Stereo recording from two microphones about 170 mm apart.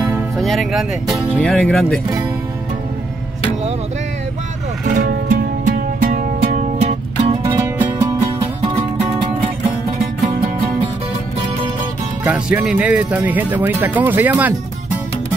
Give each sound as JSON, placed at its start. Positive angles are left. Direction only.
{"t": 0.4, "sound": "speech", "side_deg": 0}
{"t": 4.9, "sound": "music", "side_deg": -55}
{"t": 7.4, "sound": "music", "side_deg": -20}
{"t": 12.2, "sound": "speech", "side_deg": -10}